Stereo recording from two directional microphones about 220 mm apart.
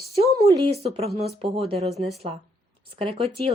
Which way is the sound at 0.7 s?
25° right (ahead or behind).